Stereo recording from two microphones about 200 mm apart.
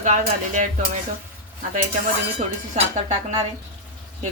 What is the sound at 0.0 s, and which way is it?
Speech, 40° right (ahead or behind).